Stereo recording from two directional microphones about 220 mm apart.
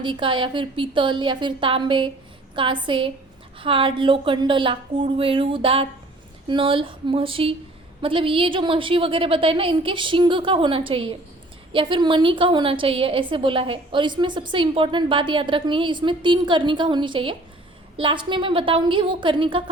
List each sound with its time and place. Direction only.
0.0 s a woman's voice: 20° right (ahead or behind)